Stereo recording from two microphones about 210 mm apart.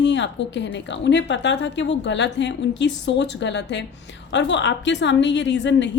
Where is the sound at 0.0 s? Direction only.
60° left (ahead or behind).